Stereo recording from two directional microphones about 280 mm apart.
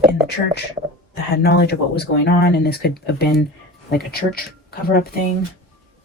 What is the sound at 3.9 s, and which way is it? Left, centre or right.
Speech, left.